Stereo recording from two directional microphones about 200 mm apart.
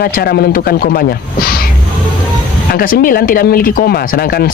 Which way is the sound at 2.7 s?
45° left (ahead or behind).